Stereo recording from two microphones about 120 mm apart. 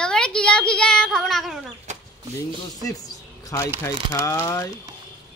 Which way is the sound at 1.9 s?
80° right.